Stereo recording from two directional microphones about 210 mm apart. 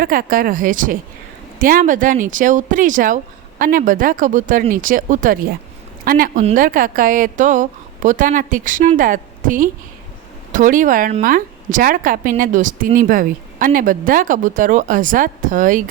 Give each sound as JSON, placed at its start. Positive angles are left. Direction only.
{"t": 0.0, "sound": "a woman's voice", "side_deg": -45}